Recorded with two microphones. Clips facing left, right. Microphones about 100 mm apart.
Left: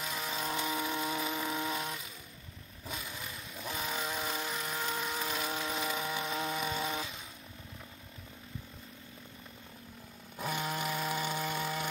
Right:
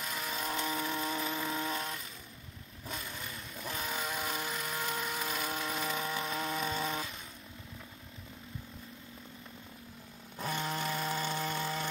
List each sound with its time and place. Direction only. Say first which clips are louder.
0.0 s chainsaw: left 1 dB; 5° left (ahead or behind)
2.9 s vehicle: even; 5° left (ahead or behind)
10.4 s chainsaw: even; 10° left (ahead or behind)